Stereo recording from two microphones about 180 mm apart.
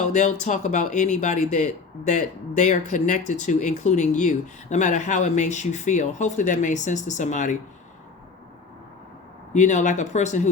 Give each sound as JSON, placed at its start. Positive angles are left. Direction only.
{"t": 0.1, "sound": "speech", "side_deg": 40}
{"t": 9.5, "sound": "speech", "side_deg": 40}